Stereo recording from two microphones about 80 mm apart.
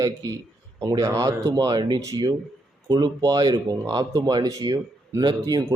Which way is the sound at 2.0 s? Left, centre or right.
Right.